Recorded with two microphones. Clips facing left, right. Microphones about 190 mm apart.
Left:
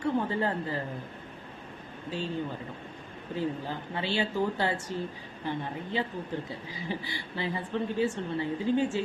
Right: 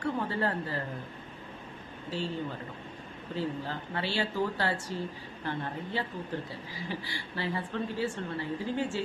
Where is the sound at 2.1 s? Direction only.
15° left (ahead or behind).